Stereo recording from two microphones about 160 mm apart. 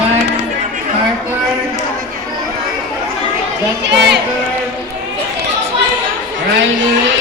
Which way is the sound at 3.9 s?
90° right.